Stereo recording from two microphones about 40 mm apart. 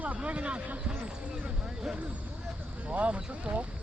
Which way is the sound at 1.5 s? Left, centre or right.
Centre.